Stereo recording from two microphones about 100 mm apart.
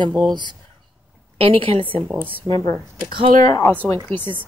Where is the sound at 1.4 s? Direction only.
70° right (ahead or behind).